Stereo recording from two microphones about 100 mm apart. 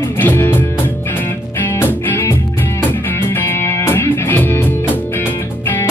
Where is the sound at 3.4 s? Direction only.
25° left (ahead or behind).